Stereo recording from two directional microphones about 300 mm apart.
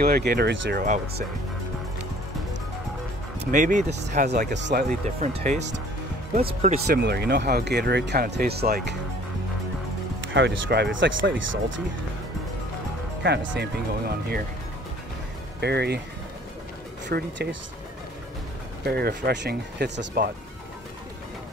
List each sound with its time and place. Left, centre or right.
0.0 s speech: right
3.5 s speech: right
7.0 s speech: right
10.2 s speech: right
13.2 s speech: right
15.6 s speech: right
17.1 s speech: right
18.9 s speech: right